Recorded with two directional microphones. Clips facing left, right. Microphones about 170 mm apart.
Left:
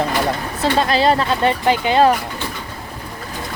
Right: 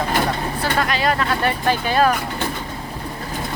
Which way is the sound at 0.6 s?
30° left (ahead or behind).